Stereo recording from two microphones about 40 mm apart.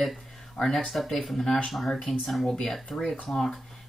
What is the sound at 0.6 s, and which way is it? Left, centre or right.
Speech, centre.